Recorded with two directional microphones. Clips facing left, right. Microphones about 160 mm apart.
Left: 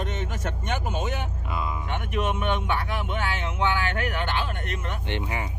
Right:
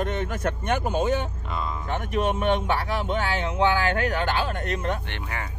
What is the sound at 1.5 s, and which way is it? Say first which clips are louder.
Speech: even; 5° left (ahead or behind).